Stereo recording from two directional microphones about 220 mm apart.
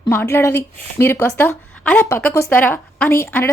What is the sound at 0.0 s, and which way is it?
A woman's voice, 10° left (ahead or behind).